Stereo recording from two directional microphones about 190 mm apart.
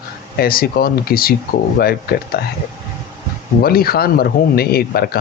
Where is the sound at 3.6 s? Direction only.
50° left (ahead or behind).